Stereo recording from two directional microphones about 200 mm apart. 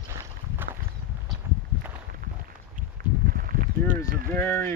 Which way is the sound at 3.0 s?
50° right (ahead or behind).